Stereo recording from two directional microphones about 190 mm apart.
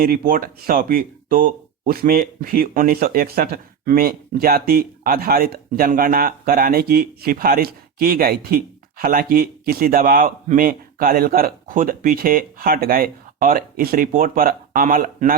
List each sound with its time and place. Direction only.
0.0 s speech: 50° right (ahead or behind)